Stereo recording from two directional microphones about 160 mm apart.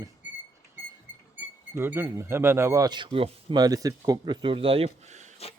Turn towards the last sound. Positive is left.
turn(degrees=-45)  # may be behind; listen again after turning